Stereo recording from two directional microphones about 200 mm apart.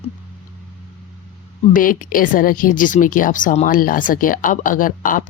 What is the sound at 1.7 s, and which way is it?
Speech, 45° left (ahead or behind).